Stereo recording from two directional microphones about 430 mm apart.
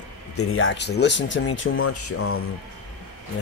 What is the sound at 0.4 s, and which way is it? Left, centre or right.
Speech, left.